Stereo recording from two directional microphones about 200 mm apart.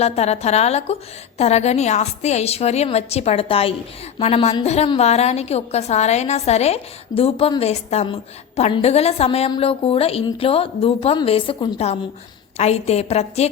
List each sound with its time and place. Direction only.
0.0 s a woman's voice: 30° left (ahead or behind)